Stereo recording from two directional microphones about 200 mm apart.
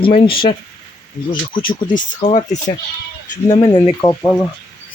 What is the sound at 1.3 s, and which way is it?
Speech, 25° left (ahead or behind).